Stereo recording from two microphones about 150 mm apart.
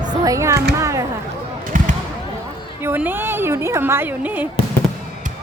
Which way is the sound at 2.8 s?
15° right (ahead or behind).